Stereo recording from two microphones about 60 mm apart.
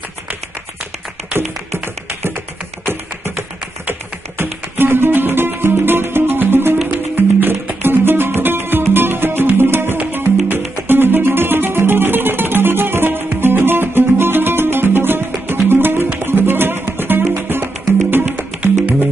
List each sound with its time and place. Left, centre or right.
2.2 s tap: right
4.4 s music: right
18.2 s music: right